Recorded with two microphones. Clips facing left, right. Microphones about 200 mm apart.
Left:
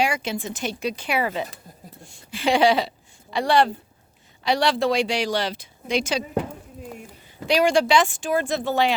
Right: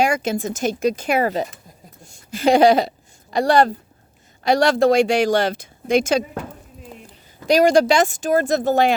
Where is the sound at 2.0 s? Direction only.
40° right (ahead or behind).